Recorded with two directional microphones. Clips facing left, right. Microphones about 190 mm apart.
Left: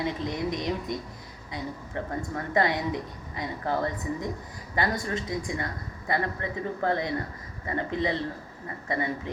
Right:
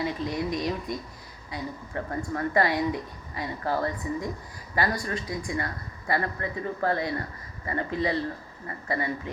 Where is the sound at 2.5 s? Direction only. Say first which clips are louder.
Even; 20° left (ahead or behind).